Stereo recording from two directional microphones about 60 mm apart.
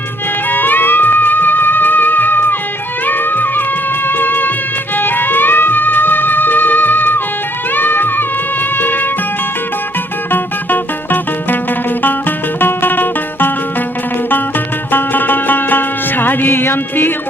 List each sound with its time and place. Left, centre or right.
0.5 s music: left
10.3 s music: left
12.5 s music: left
14.9 s music: left